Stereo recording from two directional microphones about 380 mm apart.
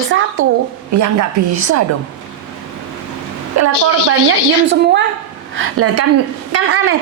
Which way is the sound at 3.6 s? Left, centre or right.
Right.